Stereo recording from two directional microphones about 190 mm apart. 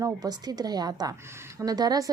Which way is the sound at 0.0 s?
20° right (ahead or behind).